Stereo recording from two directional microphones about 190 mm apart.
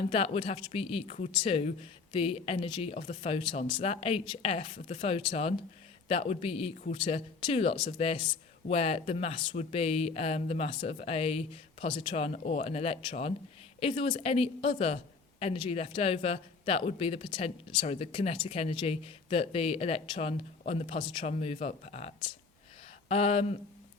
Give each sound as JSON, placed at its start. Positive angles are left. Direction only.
{"t": 0.0, "sound": "speech", "side_deg": 30}